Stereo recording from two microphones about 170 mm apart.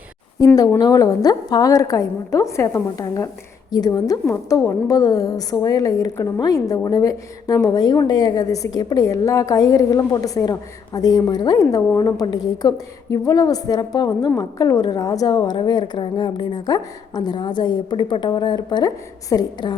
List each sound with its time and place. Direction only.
0.3 s a woman's voice: 20° left (ahead or behind)